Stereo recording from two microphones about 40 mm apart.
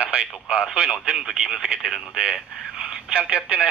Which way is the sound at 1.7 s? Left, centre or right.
Right.